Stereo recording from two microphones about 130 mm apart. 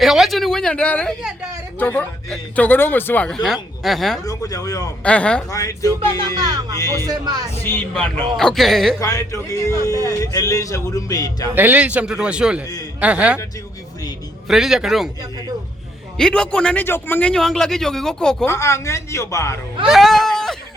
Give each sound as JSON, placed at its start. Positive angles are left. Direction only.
{"t": 0.0, "sound": "a man's voice", "side_deg": 0}
{"t": 3.2, "sound": "a man's voice", "side_deg": 5}
{"t": 4.3, "sound": "speech", "side_deg": 30}
{"t": 5.0, "sound": "speech", "side_deg": 10}
{"t": 5.5, "sound": "speech", "side_deg": 25}
{"t": 7.1, "sound": "speech", "side_deg": -30}
{"t": 7.6, "sound": "a man's voice", "side_deg": 15}
{"t": 9.0, "sound": "speech", "side_deg": 25}
{"t": 11.5, "sound": "a man's voice", "side_deg": -10}
{"t": 14.4, "sound": "a man's voice", "side_deg": -5}
{"t": 16.1, "sound": "a man's voice", "side_deg": 5}
{"t": 18.4, "sound": "speech", "side_deg": 20}
{"t": 19.9, "sound": "a sound", "side_deg": 0}